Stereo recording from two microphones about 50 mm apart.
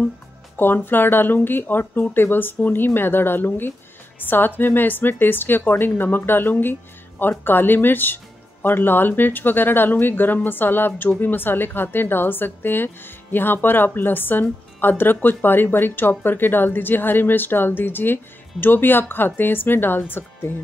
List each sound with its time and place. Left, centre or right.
0.6 s a woman's voice: left